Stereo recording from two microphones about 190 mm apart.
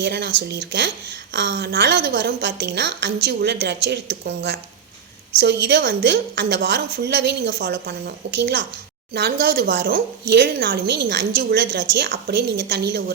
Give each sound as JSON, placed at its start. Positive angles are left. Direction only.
{"t": 0.0, "sound": "a woman's voice", "side_deg": -65}